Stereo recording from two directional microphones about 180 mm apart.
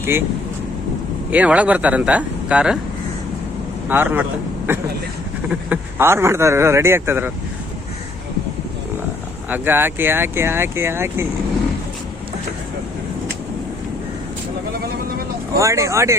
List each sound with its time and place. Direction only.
0.0 s speech: 10° right (ahead or behind)
1.3 s speech: 5° right (ahead or behind)
3.8 s a man's voice: 10° right (ahead or behind)
9.5 s speech: 10° right (ahead or behind)
15.5 s speech: 15° right (ahead or behind)